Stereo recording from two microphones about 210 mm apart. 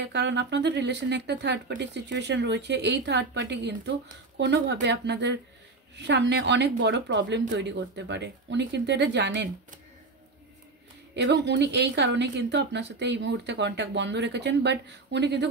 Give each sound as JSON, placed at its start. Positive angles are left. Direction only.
{"t": 0.0, "sound": "speech", "side_deg": -55}
{"t": 11.1, "sound": "speech", "side_deg": -55}